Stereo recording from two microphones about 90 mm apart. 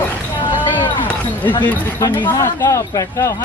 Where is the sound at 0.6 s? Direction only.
60° left (ahead or behind).